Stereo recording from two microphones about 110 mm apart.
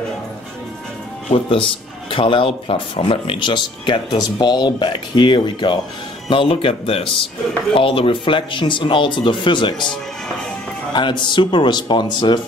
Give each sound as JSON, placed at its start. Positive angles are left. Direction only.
{"t": 1.3, "sound": "speech", "side_deg": 55}
{"t": 10.9, "sound": "speech", "side_deg": 45}